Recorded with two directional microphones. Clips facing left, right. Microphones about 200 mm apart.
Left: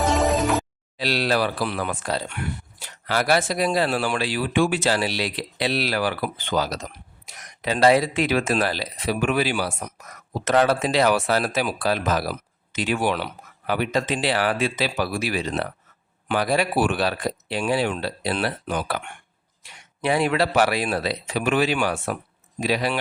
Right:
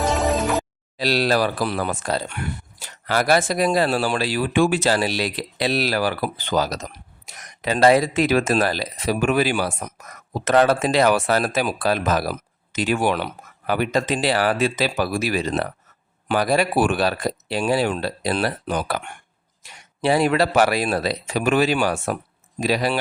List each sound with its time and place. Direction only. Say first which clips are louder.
0.0 s music: even; centre (ahead or behind)
0.9 s speech: right 3 dB; 40° right (ahead or behind)
19.6 s a sound: right 2 dB; 45° right (ahead or behind)
20.0 s speech: right 3 dB; 35° right (ahead or behind)